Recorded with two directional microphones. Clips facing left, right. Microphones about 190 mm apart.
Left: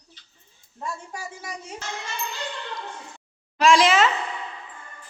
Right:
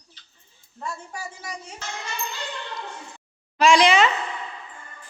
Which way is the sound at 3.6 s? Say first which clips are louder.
Right 1 dB; centre (ahead or behind).